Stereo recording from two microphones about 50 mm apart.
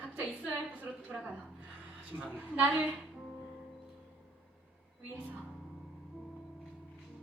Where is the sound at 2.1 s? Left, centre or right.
Right.